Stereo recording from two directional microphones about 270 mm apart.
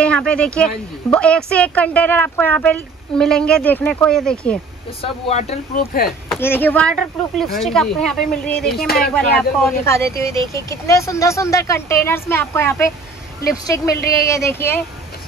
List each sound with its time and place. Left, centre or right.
0.0 s speech: centre
5.0 s speech: left
6.0 s speech: centre
8.7 s speech: left
9.0 s speech: centre
14.1 s speech: centre